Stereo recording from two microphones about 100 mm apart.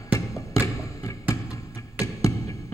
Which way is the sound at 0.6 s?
35° left (ahead or behind).